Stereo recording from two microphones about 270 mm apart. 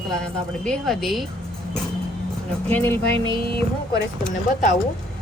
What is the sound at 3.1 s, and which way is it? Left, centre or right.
Speech, centre.